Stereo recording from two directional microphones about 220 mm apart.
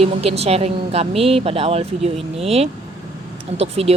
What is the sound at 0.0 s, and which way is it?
Speech, 25° right (ahead or behind).